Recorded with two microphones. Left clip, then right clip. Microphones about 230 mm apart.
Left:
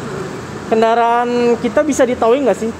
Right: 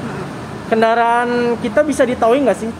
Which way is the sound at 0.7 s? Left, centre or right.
Centre.